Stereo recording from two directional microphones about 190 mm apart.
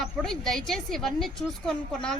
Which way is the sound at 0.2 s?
Centre (ahead or behind).